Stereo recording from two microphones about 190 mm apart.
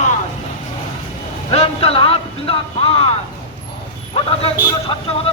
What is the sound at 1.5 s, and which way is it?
Music, 30° left (ahead or behind).